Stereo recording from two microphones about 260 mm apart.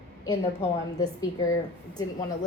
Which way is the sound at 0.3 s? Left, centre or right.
Centre.